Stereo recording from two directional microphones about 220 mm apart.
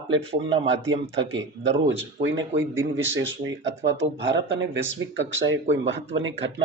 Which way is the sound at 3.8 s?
55° right (ahead or behind).